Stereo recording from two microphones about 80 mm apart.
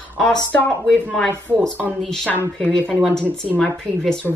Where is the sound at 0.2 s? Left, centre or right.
Centre.